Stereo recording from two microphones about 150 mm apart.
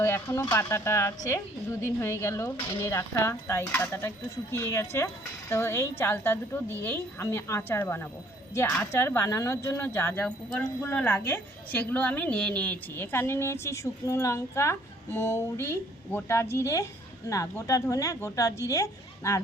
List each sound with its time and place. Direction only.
0.0 s speech: 20° left (ahead or behind)